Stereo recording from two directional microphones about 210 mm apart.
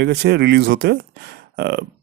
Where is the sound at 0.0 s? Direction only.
50° right (ahead or behind).